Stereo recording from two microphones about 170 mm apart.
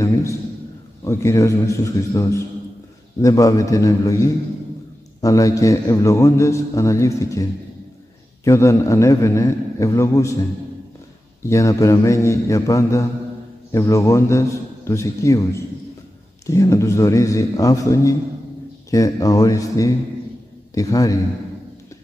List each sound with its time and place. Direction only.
0.0 s a sound: 15° left (ahead or behind)
1.0 s a man's voice: 15° left (ahead or behind)
3.2 s a man's voice: 20° left (ahead or behind)
8.5 s a man's voice: 15° left (ahead or behind)
11.4 s a man's voice: 20° left (ahead or behind)